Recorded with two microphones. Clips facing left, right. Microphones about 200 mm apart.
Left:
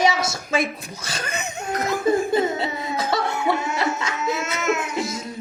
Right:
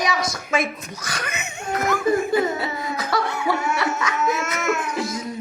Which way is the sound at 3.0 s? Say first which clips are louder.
Left 2 dB; 25° left (ahead or behind).